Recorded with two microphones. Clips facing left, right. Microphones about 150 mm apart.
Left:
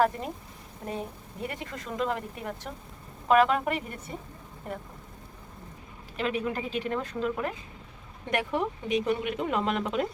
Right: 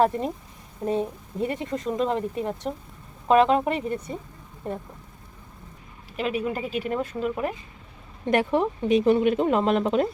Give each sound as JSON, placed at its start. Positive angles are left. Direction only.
{"t": 0.9, "sound": "speech", "side_deg": -25}
{"t": 6.1, "sound": "a woman's voice", "side_deg": -10}
{"t": 8.3, "sound": "speech", "side_deg": -35}